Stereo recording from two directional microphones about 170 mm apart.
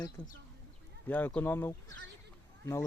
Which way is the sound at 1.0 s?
10° left (ahead or behind).